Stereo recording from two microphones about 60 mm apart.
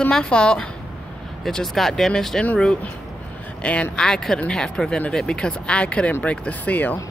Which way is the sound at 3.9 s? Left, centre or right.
Centre.